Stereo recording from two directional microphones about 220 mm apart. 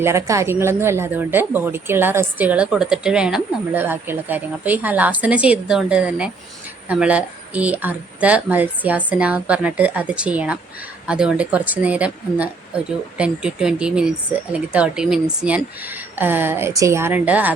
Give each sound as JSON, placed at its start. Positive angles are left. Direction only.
{"t": 0.0, "sound": "speech", "side_deg": -10}